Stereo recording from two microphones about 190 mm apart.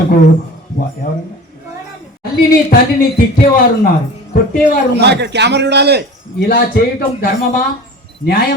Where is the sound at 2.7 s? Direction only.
50° left (ahead or behind).